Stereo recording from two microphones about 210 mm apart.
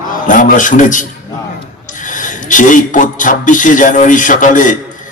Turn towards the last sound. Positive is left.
turn(degrees=40)  # may be behind; listen again after turning